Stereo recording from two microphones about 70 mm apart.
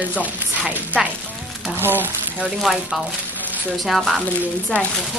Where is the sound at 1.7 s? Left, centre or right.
Right.